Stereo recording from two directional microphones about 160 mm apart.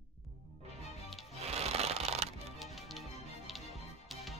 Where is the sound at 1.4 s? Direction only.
40° right (ahead or behind).